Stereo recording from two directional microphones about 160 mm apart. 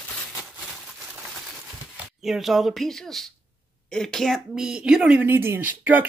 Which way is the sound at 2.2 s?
Centre (ahead or behind).